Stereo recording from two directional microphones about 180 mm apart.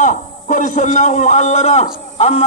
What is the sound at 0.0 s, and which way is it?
A man's voice, 45° left (ahead or behind).